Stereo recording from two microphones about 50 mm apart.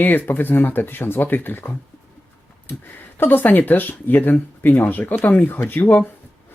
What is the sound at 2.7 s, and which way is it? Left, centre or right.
Speech, left.